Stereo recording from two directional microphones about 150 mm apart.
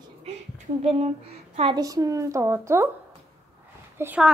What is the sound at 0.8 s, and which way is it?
Speech, 40° right (ahead or behind).